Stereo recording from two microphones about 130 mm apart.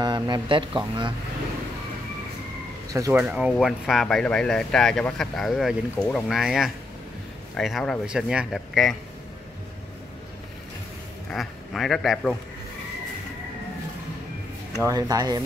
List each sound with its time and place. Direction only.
0.0 s speech: 35° right (ahead or behind)
3.1 s speech: 15° right (ahead or behind)
11.2 s a man's voice: centre (ahead or behind)
14.8 s speech: 30° right (ahead or behind)